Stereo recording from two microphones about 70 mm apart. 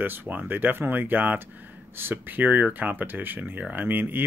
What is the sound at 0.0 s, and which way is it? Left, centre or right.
Speech, right.